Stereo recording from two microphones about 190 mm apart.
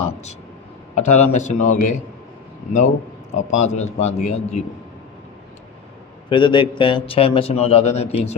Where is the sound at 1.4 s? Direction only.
40° left (ahead or behind).